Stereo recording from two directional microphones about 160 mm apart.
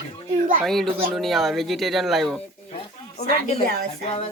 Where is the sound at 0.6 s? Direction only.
Centre (ahead or behind).